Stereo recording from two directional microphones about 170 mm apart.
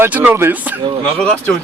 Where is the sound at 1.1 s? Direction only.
5° left (ahead or behind).